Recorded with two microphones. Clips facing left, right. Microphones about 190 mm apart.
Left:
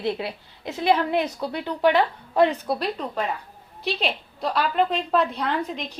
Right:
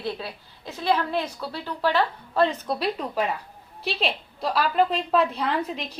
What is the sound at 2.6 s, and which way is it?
A woman's voice, 5° left (ahead or behind).